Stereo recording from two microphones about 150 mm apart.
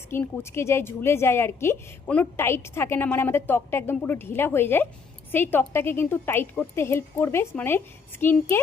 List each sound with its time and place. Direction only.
0.1 s a woman's voice: 15° left (ahead or behind)